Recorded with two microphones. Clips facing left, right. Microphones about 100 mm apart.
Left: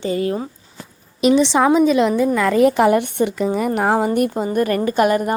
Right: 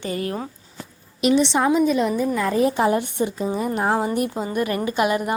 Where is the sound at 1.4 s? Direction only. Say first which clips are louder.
Left 4 dB; 90° left; by 4.3 s 55° left (ahead or behind).